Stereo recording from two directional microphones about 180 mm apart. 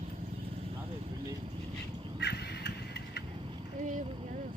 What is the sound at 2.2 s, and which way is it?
Vehicle, 65° left (ahead or behind).